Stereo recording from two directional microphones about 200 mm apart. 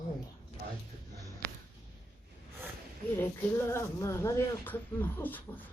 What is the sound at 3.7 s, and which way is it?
A woman's voice, 15° left (ahead or behind).